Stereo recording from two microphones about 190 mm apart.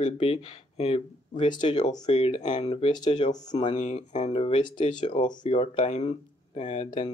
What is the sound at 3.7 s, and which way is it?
Speech, 40° left (ahead or behind).